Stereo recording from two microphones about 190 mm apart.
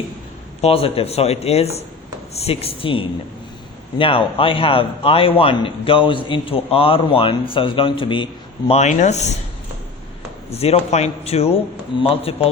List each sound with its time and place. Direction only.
0.6 s a man's voice: 30° left (ahead or behind)
10.5 s speech: 35° left (ahead or behind)